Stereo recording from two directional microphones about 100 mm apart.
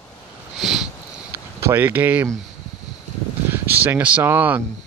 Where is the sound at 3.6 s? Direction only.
20° right (ahead or behind).